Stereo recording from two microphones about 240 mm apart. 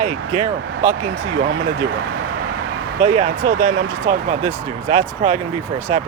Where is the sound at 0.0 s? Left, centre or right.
Right.